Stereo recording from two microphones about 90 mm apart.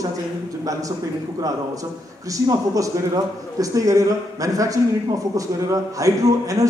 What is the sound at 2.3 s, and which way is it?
Speech, 40° right (ahead or behind).